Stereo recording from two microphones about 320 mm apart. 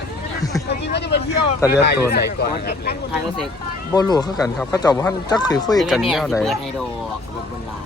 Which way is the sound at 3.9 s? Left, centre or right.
Centre.